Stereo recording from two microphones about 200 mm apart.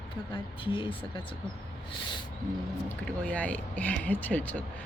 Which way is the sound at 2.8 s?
5° left (ahead or behind).